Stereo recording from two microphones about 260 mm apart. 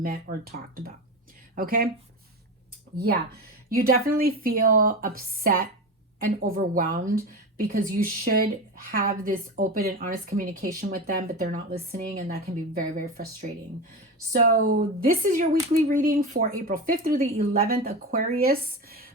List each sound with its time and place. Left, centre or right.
0.0 s speech: right
3.8 s speech: right